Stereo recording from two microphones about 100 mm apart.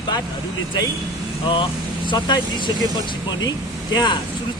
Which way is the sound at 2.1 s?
50° left (ahead or behind).